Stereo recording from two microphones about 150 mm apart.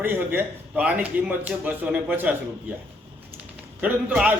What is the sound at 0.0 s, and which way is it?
A man's voice, 15° right (ahead or behind).